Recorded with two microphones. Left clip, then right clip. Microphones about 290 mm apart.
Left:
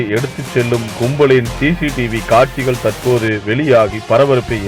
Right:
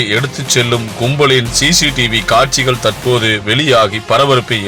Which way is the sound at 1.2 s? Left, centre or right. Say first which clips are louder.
Right 1 dB; centre.